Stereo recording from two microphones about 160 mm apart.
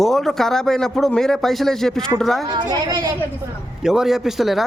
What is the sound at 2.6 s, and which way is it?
Speech, 25° right (ahead or behind).